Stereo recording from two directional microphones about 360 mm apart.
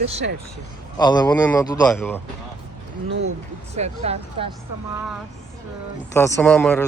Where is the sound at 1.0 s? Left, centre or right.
Centre.